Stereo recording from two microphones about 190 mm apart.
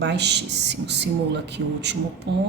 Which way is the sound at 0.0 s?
65° right (ahead or behind).